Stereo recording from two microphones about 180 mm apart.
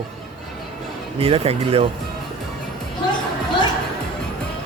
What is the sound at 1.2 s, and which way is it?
Speech, 35° right (ahead or behind).